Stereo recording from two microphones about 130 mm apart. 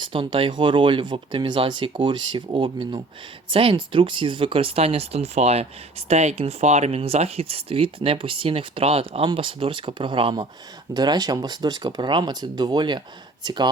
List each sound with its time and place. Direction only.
0.1 s speech: 40° right (ahead or behind)